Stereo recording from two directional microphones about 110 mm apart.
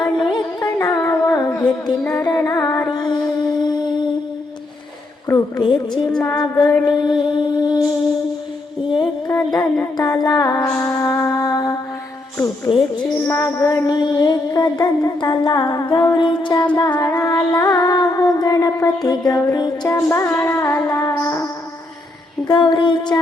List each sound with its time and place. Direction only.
0.0 s carnatic music: 45° left (ahead or behind)
0.8 s music: 30° left (ahead or behind)
2.9 s a sound: 40° left (ahead or behind)
5.5 s a sound: 45° left (ahead or behind)
6.3 s music: 35° left (ahead or behind)
9.2 s music: 35° left (ahead or behind)
10.2 s music: 40° left (ahead or behind)
17.0 s music: 30° left (ahead or behind)
22.4 s a sound: 50° left (ahead or behind)